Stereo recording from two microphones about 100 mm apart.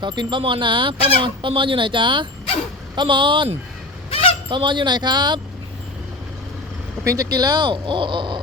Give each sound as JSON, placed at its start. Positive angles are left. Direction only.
{"t": 0.0, "sound": "speech", "side_deg": -50}
{"t": 4.1, "sound": "honk", "side_deg": 70}
{"t": 4.4, "sound": "speech", "side_deg": -50}
{"t": 7.0, "sound": "speech", "side_deg": -35}